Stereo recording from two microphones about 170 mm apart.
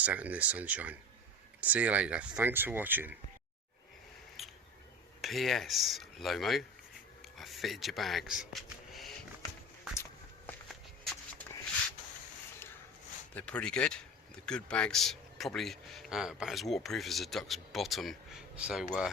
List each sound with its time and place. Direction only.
0.0 s speech: 10° right (ahead or behind)
4.4 s a sound: centre (ahead or behind)
5.2 s speech: centre (ahead or behind)
7.2 s a sound: centre (ahead or behind)
9.9 s walk: 15° left (ahead or behind)
13.3 s speech: 5° left (ahead or behind)